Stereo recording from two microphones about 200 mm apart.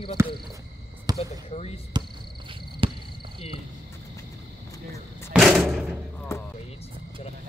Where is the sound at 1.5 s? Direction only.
30° left (ahead or behind).